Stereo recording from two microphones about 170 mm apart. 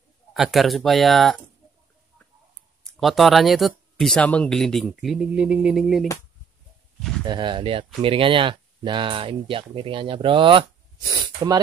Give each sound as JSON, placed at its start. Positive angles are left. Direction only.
{"t": 0.3, "sound": "speech", "side_deg": 0}
{"t": 3.0, "sound": "speech", "side_deg": 0}
{"t": 7.2, "sound": "speech", "side_deg": -30}